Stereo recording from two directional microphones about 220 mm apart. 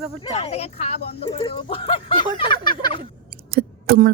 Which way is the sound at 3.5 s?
45° right (ahead or behind).